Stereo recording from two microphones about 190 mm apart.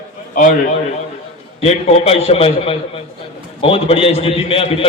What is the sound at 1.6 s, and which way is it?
A man's voice, 35° left (ahead or behind).